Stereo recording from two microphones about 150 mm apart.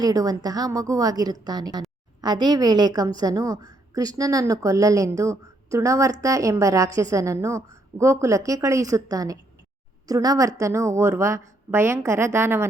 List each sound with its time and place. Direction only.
0.0 s a woman's voice: 25° right (ahead or behind)